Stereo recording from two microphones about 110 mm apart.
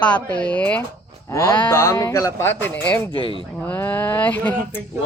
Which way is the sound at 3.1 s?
50° left (ahead or behind).